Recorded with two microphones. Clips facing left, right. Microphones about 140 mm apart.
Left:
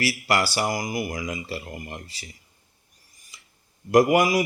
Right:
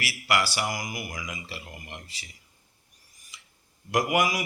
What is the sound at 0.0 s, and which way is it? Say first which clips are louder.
A man's voice: left 4 dB; 35° left (ahead or behind).